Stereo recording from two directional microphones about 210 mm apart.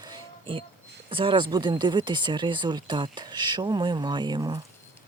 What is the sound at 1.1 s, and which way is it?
Speech, 25° right (ahead or behind).